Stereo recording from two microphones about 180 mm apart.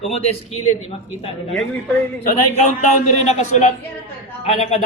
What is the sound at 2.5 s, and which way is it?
A woman's voice, 40° left (ahead or behind).